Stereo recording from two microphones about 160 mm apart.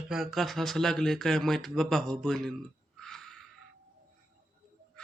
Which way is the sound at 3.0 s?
Centre (ahead or behind).